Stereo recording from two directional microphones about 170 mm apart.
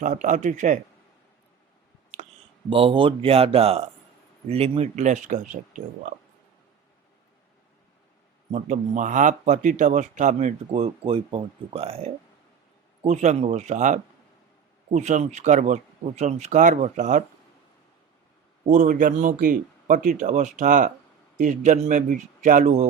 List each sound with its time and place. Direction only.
0.0 s speech: 50° right (ahead or behind)
2.6 s speech: 30° right (ahead or behind); by 6.1 s 50° right (ahead or behind)
8.5 s speech: 45° right (ahead or behind)
18.7 s speech: 45° right (ahead or behind)